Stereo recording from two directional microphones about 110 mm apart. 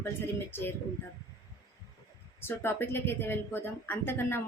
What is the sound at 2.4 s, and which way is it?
Speech, 20° left (ahead or behind).